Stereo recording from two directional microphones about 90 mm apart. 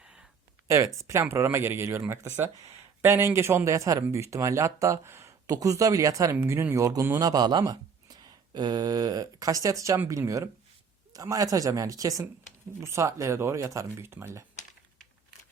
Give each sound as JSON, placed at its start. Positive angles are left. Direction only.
{"t": 1.0, "sound": "speech", "side_deg": -30}